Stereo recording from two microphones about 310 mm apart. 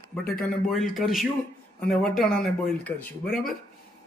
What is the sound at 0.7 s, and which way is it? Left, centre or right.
Speech, centre.